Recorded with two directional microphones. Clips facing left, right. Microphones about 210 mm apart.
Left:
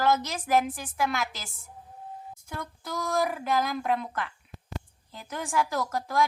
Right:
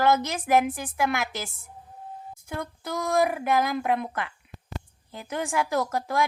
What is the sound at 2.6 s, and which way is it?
A woman's voice, 60° right (ahead or behind).